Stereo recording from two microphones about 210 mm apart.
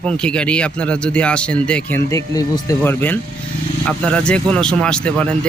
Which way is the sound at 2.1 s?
15° left (ahead or behind).